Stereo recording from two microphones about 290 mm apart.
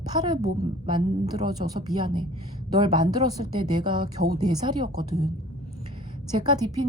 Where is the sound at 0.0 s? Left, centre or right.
Centre.